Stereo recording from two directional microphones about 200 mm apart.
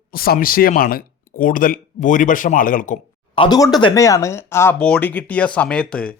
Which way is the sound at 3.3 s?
25° left (ahead or behind).